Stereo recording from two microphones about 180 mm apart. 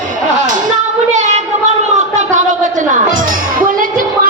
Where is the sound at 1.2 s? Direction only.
40° right (ahead or behind).